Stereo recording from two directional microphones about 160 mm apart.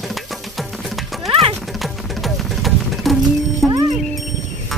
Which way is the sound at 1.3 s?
35° right (ahead or behind).